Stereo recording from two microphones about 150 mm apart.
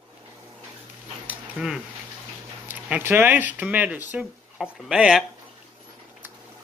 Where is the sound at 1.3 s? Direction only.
5° right (ahead or behind).